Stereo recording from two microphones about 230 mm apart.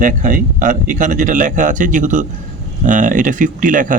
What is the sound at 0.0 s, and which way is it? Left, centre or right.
Speech, right.